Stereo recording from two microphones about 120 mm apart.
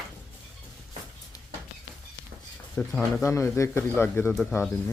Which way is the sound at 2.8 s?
15° left (ahead or behind).